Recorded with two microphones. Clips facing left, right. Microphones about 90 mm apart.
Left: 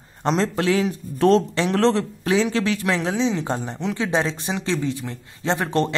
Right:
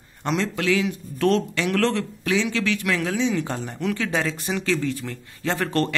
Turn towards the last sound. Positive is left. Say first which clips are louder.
# left 2 dB
turn(degrees=20)  # may be behind; listen again after turning